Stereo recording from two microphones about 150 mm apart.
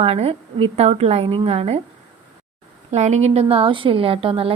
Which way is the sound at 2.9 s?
50° right (ahead or behind).